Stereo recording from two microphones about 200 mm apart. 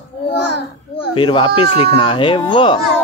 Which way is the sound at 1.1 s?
25° left (ahead or behind).